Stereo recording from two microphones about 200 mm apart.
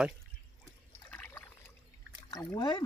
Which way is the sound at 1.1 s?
10° left (ahead or behind).